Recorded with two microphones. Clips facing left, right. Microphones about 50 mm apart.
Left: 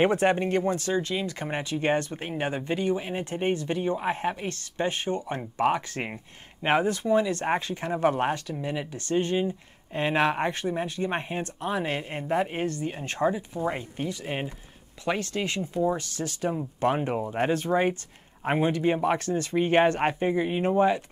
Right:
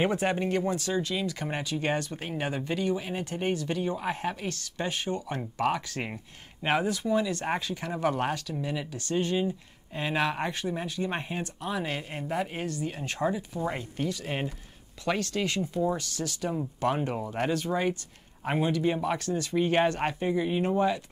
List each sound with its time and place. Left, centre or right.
0.1 s speech: left
9.1 s speech: centre
9.9 s speech: left
17.1 s speech: centre
17.4 s speech: left